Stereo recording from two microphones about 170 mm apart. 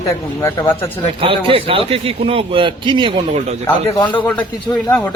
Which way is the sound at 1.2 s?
30° right (ahead or behind).